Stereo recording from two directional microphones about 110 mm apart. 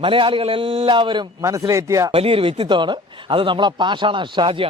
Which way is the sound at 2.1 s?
55° right (ahead or behind).